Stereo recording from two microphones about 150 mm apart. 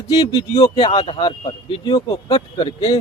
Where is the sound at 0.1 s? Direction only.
30° left (ahead or behind).